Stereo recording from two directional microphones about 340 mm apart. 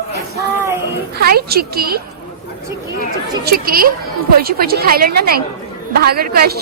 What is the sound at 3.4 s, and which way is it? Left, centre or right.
A woman's voice, right.